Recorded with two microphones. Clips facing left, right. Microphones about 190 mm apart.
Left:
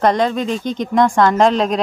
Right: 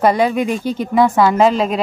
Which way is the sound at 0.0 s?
10° right (ahead or behind).